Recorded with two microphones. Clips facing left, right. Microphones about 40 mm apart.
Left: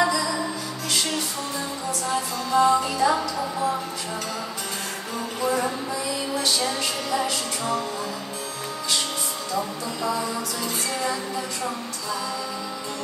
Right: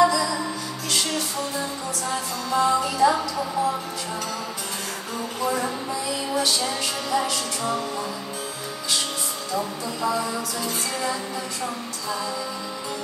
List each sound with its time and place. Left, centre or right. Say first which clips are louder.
0.0 s music: right 3 dB; centre
2.5 s speech: left 2 dB; centre
5.4 s music: left 1 dB; centre
9.5 s speech: right 1 dB; centre